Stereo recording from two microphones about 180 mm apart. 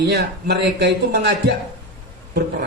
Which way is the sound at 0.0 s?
70° right (ahead or behind).